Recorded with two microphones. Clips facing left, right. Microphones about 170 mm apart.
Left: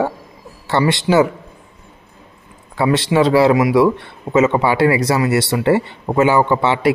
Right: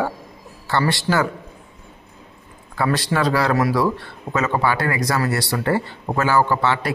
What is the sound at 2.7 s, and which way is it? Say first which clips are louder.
A man's voice: left 6 dB; 25° left (ahead or behind).